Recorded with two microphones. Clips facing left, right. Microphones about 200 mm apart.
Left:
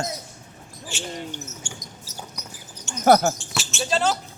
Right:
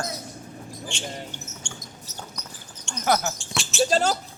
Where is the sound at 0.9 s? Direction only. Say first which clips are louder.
Left 5 dB; 5° left (ahead or behind).